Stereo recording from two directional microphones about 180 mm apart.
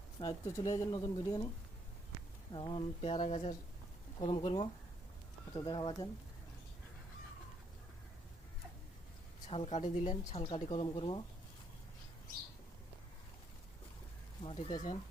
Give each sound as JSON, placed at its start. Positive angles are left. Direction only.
{"t": 0.2, "sound": "speech", "side_deg": 20}
{"t": 2.5, "sound": "speech", "side_deg": 25}
{"t": 9.5, "sound": "speech", "side_deg": 35}
{"t": 10.4, "sound": "speech", "side_deg": 30}
{"t": 14.4, "sound": "speech", "side_deg": 30}